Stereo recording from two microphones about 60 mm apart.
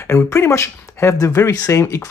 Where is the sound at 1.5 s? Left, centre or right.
Left.